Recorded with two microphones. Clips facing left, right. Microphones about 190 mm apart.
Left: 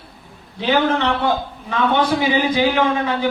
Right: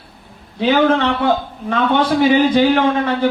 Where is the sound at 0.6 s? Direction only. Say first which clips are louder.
Right 4 dB; 55° right (ahead or behind).